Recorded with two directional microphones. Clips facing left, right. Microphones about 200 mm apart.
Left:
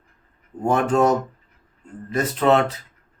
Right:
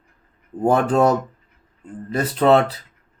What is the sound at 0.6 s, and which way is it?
Speech, 35° right (ahead or behind).